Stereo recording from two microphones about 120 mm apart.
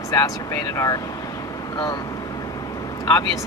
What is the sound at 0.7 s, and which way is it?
Speech, 30° left (ahead or behind).